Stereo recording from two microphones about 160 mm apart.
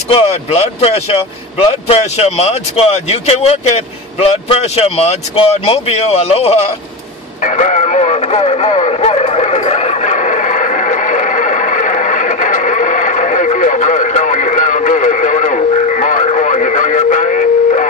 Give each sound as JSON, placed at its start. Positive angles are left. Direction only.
{"t": 0.1, "sound": "speech", "side_deg": 35}
{"t": 7.4, "sound": "radio", "side_deg": 50}